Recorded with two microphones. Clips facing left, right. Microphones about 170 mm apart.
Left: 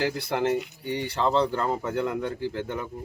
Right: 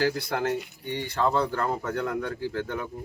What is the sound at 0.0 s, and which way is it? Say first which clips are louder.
Speech: even; 25° left (ahead or behind).